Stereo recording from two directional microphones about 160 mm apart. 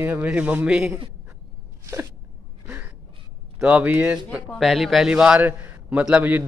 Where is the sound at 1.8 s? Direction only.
15° right (ahead or behind).